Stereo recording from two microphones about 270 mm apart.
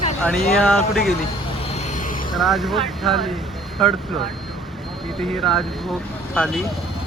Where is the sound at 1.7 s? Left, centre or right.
Left.